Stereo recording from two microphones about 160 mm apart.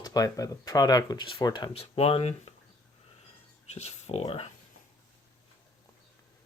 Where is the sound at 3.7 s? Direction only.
45° left (ahead or behind).